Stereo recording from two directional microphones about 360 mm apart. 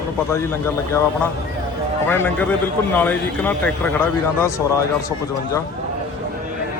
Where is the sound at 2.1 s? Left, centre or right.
Centre.